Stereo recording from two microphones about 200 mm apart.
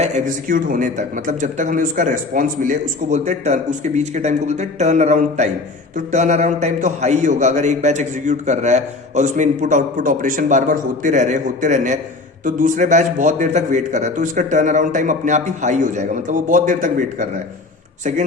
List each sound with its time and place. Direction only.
0.0 s a man's voice: 40° right (ahead or behind)